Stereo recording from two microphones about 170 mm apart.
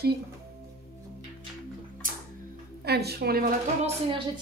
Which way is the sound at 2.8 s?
70° right (ahead or behind).